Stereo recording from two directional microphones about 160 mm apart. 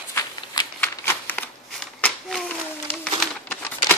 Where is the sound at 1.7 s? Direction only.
5° left (ahead or behind).